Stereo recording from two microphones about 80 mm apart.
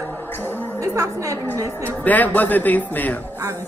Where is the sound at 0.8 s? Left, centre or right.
Right.